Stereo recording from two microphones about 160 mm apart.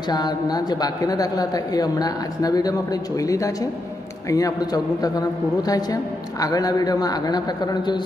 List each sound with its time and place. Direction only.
0.1 s a woman's voice: 25° left (ahead or behind)